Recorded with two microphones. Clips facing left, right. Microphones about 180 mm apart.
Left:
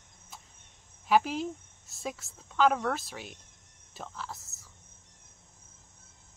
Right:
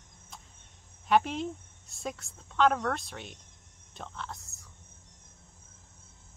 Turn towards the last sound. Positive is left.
turn(degrees=0)  # may be behind; listen again after turning